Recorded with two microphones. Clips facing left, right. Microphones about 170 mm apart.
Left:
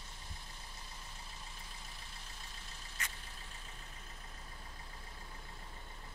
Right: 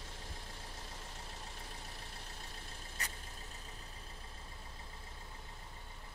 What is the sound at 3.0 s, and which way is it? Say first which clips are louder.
Vehicle: even; 35° right (ahead or behind).